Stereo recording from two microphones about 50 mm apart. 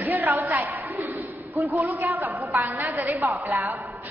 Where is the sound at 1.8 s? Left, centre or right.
Right.